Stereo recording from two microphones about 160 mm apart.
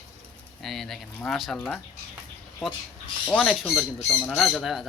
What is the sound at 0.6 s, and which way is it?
Speech, centre (ahead or behind).